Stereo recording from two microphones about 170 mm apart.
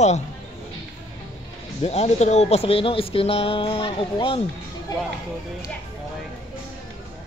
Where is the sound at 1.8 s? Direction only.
40° left (ahead or behind).